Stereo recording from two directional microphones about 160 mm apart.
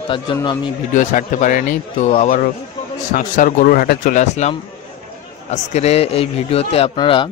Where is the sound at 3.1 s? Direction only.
55° left (ahead or behind).